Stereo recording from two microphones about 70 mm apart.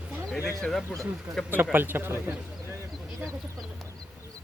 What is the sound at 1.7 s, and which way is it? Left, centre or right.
Speech, right.